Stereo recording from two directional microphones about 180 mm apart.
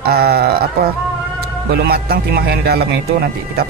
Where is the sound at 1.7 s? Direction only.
60° right (ahead or behind).